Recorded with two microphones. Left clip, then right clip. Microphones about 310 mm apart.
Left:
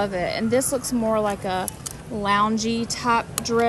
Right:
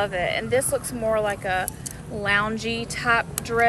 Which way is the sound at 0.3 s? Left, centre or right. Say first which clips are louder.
Even; centre.